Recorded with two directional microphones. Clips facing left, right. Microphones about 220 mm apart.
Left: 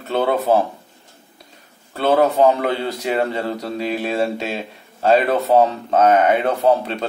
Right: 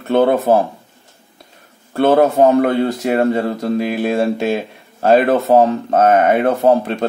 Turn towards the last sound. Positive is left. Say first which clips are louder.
# right 3 dB
turn(degrees=-50)  # may be behind; listen again after turning